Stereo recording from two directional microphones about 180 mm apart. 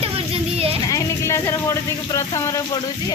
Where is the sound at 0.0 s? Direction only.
35° right (ahead or behind).